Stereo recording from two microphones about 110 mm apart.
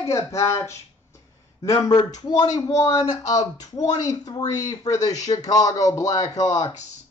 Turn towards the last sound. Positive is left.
turn(degrees=30)  # may be behind; listen again after turning